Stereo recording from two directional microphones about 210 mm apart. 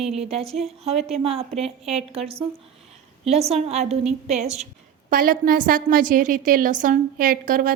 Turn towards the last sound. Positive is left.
turn(degrees=-40)  # may be behind; listen again after turning